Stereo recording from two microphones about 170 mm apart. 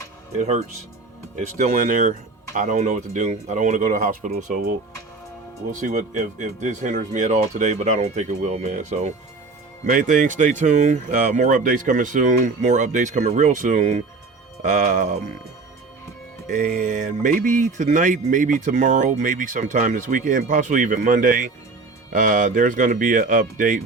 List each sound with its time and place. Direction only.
0.3 s speech: 45° right (ahead or behind)
5.8 s speech: 45° right (ahead or behind)
16.5 s speech: 50° right (ahead or behind)